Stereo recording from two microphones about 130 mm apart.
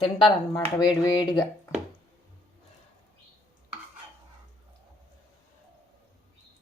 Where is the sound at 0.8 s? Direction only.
30° left (ahead or behind).